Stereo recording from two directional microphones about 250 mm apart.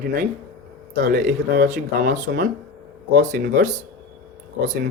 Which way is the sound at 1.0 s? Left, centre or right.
Right.